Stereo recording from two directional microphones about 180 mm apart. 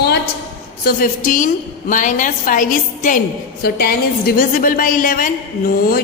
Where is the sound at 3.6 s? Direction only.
60° left (ahead or behind).